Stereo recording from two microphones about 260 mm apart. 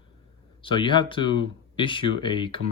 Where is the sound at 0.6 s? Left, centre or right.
Centre.